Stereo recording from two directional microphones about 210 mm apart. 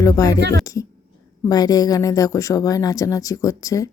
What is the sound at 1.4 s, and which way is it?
Speech, 15° left (ahead or behind).